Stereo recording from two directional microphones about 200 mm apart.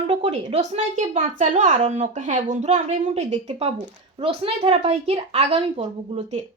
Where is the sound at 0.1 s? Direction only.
30° right (ahead or behind).